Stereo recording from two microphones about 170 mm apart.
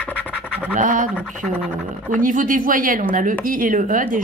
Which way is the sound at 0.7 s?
50° right (ahead or behind).